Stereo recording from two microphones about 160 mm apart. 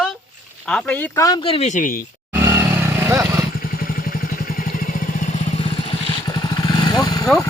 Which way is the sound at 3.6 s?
65° left (ahead or behind).